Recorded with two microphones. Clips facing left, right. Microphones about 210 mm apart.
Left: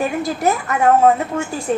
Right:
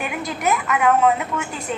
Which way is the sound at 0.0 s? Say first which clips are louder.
Left 6 dB; 30° left (ahead or behind).